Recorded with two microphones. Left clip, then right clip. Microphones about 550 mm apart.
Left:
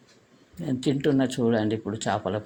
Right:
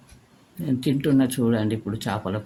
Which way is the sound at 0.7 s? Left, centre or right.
Right.